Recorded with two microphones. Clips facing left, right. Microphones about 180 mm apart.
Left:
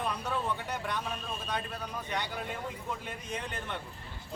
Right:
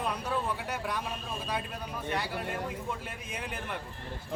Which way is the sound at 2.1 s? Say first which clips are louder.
Right 4 dB; 5° right (ahead or behind).